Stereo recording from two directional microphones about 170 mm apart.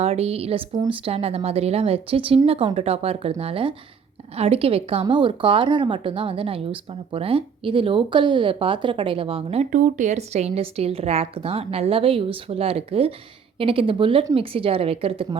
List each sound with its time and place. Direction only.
0.0 s a woman's voice: 35° right (ahead or behind)
0.7 s speech: 20° right (ahead or behind)
1.0 s a woman's voice: 35° right (ahead or behind)